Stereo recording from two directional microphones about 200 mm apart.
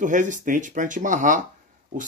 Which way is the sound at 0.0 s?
40° right (ahead or behind).